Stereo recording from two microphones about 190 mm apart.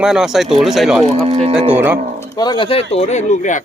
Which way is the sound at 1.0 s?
30° right (ahead or behind).